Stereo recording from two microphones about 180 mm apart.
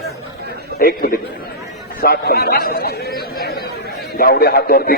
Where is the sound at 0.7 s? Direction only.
60° left (ahead or behind).